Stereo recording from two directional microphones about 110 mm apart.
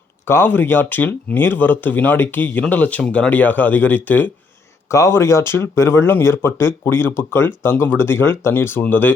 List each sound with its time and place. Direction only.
0.3 s speech: 20° left (ahead or behind)
4.9 s speech: 25° left (ahead or behind)